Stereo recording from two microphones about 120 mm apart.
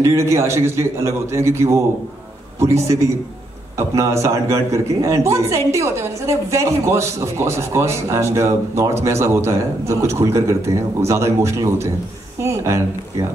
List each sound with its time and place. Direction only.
0.0 s a man's voice: 25° right (ahead or behind)